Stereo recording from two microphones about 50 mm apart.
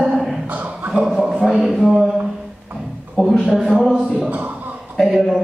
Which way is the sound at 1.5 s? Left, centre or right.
Centre.